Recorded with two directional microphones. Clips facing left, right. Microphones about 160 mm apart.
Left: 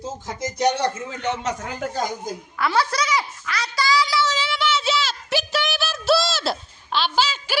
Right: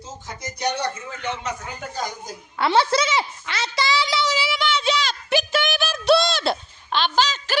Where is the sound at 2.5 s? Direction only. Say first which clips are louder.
Right 3 dB; 25° right (ahead or behind); by 4.6 s 10° right (ahead or behind).